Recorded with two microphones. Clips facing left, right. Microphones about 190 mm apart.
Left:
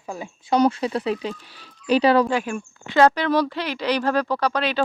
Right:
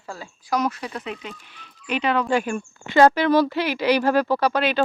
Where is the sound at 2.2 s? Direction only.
Centre (ahead or behind).